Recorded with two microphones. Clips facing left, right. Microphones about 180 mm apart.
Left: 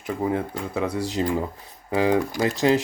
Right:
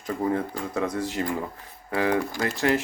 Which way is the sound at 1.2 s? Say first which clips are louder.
Left 4 dB; 20° left (ahead or behind).